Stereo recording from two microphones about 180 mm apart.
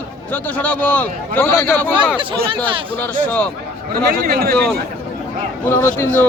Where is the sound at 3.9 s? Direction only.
55° right (ahead or behind).